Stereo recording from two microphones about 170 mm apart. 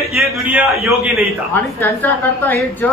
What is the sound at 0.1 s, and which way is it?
A man's voice, 5° right (ahead or behind).